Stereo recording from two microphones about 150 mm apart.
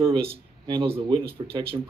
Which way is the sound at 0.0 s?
35° right (ahead or behind).